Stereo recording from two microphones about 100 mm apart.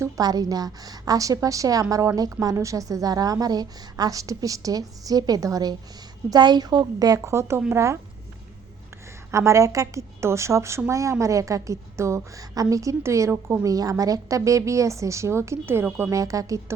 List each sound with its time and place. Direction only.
0.2 s a woman's voice: 40° right (ahead or behind)
9.3 s a woman's voice: 30° right (ahead or behind)